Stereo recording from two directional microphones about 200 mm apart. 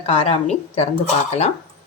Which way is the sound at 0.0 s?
30° left (ahead or behind).